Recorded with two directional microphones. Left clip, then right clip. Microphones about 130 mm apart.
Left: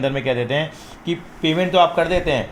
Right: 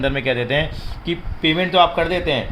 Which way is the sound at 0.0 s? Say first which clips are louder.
Right 1 dB; 5° right (ahead or behind).